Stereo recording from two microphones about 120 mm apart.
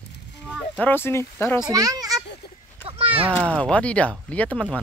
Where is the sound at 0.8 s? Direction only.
20° left (ahead or behind).